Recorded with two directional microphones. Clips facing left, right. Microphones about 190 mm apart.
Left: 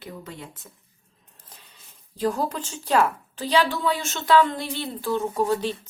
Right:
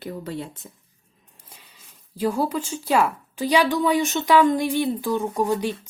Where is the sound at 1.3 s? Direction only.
10° right (ahead or behind).